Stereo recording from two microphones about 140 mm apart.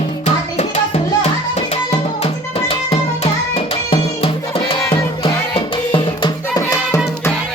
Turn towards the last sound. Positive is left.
turn(degrees=25)  # may be behind; listen again after turning